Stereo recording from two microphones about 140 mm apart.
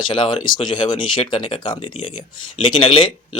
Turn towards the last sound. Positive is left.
turn(degrees=40)  # may be behind; listen again after turning